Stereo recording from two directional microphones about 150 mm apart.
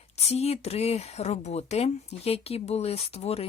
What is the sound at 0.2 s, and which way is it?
Speech, 45° left (ahead or behind).